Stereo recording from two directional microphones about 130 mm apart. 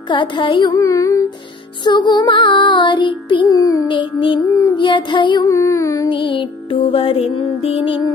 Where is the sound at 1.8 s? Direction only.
35° left (ahead or behind).